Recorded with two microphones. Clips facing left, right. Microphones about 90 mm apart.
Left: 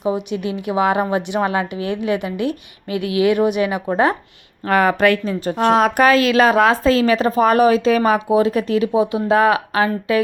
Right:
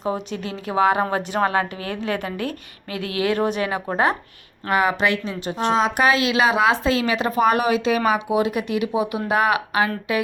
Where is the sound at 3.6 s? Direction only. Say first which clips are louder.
Left 4 dB; 30° right (ahead or behind).